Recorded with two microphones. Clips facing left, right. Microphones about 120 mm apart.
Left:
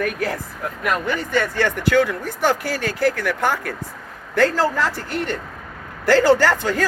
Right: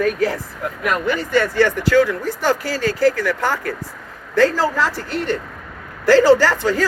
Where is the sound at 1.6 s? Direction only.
55° left (ahead or behind).